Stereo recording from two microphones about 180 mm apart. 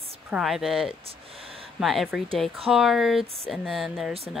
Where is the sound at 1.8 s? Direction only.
Centre (ahead or behind).